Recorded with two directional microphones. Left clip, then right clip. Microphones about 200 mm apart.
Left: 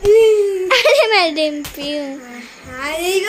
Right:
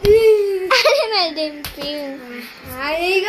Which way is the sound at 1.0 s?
35° left (ahead or behind).